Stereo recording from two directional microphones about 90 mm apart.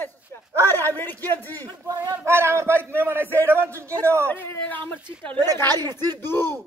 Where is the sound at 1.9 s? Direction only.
25° right (ahead or behind).